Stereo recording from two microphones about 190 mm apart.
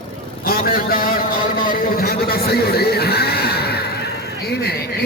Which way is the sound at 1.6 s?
50° left (ahead or behind).